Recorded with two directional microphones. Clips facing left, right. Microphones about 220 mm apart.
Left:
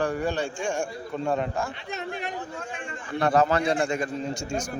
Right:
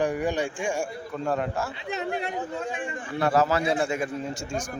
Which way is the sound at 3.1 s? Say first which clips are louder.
Left 1 dB; 5° right (ahead or behind).